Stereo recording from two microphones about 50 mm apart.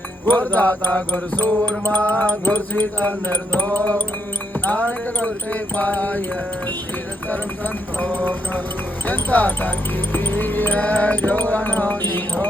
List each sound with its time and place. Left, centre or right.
0.3 s speech: left
7.3 s speech: left